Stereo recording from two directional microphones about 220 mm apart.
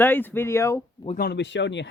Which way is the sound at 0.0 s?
10° left (ahead or behind).